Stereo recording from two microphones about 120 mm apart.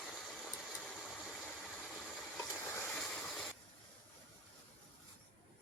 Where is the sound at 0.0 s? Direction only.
Centre (ahead or behind).